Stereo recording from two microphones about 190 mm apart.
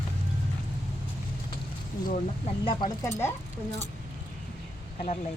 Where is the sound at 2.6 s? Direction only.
25° left (ahead or behind).